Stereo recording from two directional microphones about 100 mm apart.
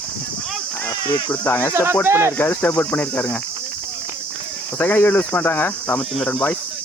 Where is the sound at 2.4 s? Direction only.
20° left (ahead or behind).